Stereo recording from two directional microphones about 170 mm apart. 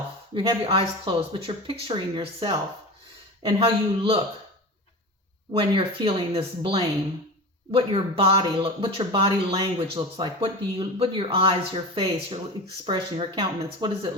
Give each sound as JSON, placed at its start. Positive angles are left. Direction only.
{"t": 0.3, "sound": "speech", "side_deg": -30}
{"t": 5.5, "sound": "speech", "side_deg": -30}